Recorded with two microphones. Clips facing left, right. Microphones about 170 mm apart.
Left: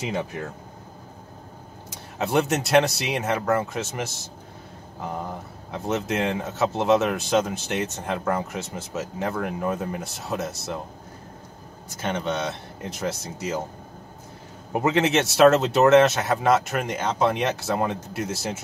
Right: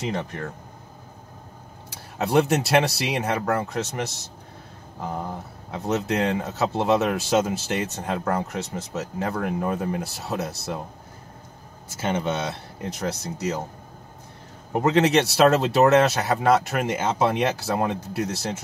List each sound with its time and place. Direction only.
0.0 s speech: 5° left (ahead or behind)
1.9 s speech: centre (ahead or behind)
5.7 s speech: centre (ahead or behind)
12.0 s speech: 5° right (ahead or behind)
14.7 s speech: 5° left (ahead or behind)